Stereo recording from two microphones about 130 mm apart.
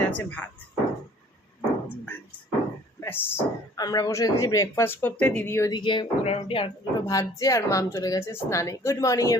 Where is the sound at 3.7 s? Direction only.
30° left (ahead or behind).